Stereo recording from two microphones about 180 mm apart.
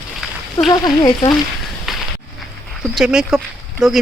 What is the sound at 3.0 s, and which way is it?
Speech, 5° right (ahead or behind).